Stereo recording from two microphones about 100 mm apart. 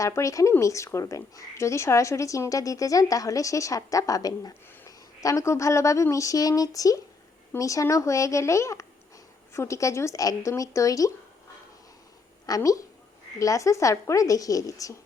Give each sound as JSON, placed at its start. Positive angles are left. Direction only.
{"t": 0.0, "sound": "a woman's voice", "side_deg": 30}
{"t": 12.5, "sound": "a woman's voice", "side_deg": 35}